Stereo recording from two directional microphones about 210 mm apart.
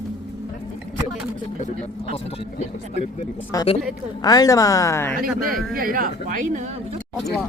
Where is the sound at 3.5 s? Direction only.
20° left (ahead or behind).